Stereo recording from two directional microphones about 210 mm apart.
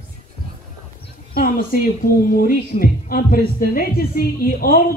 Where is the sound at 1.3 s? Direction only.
45° left (ahead or behind).